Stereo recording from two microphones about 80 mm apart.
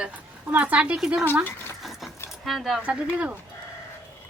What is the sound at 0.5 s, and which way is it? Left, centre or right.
Speech, centre.